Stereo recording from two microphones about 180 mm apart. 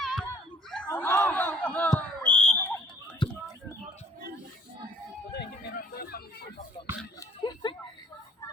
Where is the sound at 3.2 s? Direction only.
25° left (ahead or behind).